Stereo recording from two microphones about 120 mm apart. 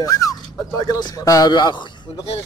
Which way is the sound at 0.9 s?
35° left (ahead or behind).